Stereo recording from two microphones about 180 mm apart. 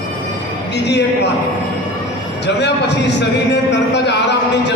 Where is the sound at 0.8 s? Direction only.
70° left (ahead or behind).